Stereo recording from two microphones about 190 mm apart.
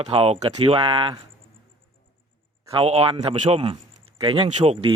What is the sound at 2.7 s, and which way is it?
Speech, 30° right (ahead or behind).